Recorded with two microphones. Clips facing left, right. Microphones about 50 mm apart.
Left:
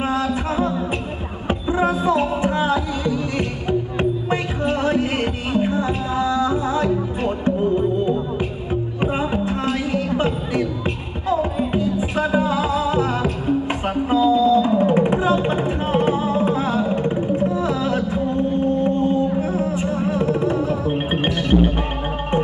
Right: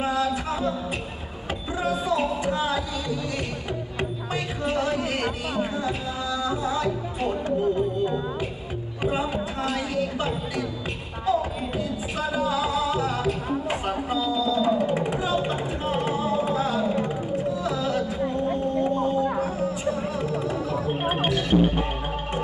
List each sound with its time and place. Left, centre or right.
0.0 s music: left
9.0 s a sound: left
11.3 s music: left